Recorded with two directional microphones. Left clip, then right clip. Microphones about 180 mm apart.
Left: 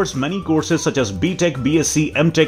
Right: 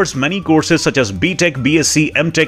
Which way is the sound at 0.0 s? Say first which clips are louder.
Right 5 dB; 5° right (ahead or behind).